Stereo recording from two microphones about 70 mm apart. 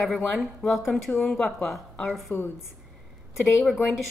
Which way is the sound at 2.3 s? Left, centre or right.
Left.